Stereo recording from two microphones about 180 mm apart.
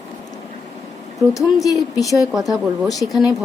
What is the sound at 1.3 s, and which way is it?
Speech, 20° left (ahead or behind).